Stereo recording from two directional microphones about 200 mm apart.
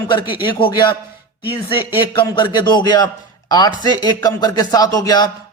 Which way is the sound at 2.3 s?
20° left (ahead or behind).